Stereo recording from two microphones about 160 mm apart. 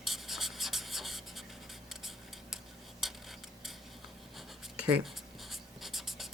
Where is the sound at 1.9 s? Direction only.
Centre (ahead or behind).